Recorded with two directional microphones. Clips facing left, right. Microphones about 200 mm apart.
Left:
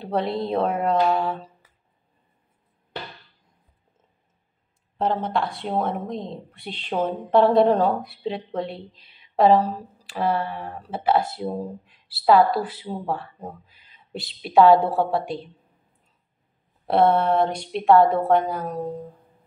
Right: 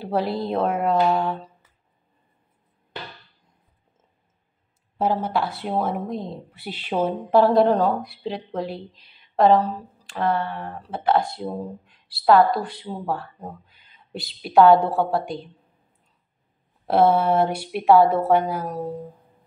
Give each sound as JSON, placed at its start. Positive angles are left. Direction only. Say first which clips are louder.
{"t": 0.0, "sound": "a woman's voice", "louder": "right 1 dB", "side_deg": -5}
{"t": 4.9, "sound": "a woman's voice", "louder": "right 1 dB", "side_deg": -5}
{"t": 16.8, "sound": "a woman's voice", "louder": "right 1 dB", "side_deg": 0}